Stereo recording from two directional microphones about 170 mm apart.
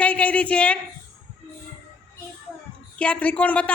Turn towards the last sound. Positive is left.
turn(degrees=5)  # may be behind; listen again after turning